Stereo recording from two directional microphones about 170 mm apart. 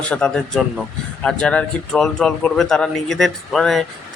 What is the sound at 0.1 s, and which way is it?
Speech, 5° left (ahead or behind).